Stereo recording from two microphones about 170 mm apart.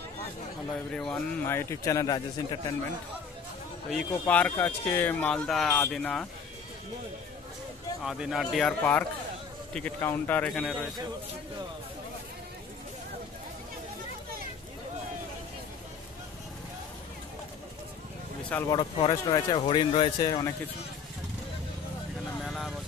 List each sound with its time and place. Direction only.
0.9 s speech: 5° left (ahead or behind); by 2.7 s 25° left (ahead or behind)
3.9 s speech: 10° left (ahead or behind)
8.0 s speech: centre (ahead or behind)
18.7 s speech: 25° left (ahead or behind)
22.4 s vehicle: centre (ahead or behind)